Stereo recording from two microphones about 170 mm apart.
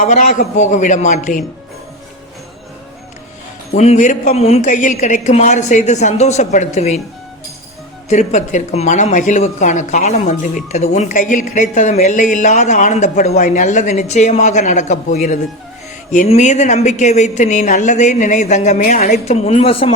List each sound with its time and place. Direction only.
0.0 s speech: 45° left (ahead or behind)
3.8 s speech: 45° left (ahead or behind)
8.1 s speech: 45° left (ahead or behind)